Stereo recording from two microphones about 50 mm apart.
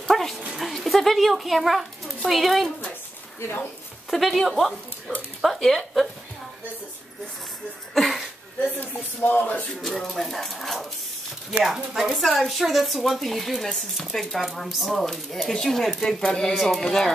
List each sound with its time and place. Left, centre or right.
0.1 s dog: centre
0.6 s a child's voice: centre
4.1 s speech: centre
7.9 s a sound: centre
8.7 s a sound: left
9.8 s speech: centre